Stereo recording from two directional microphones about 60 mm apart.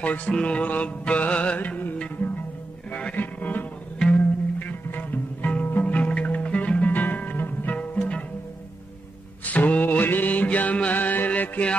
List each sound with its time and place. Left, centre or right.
0.0 s music: left
2.9 s music: left
7.7 s music: left
9.5 s music: left